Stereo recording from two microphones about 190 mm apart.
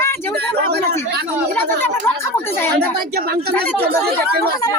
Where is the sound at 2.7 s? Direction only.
55° right (ahead or behind).